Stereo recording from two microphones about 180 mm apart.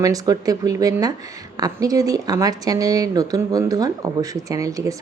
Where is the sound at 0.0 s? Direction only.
20° right (ahead or behind).